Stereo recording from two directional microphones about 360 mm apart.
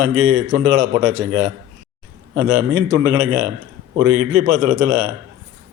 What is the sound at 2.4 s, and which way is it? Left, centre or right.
A man's voice, right.